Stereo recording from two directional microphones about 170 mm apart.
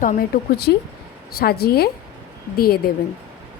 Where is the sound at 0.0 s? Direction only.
55° left (ahead or behind).